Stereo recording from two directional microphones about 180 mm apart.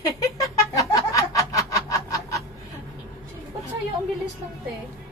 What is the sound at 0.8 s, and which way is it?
Snicker, 20° left (ahead or behind).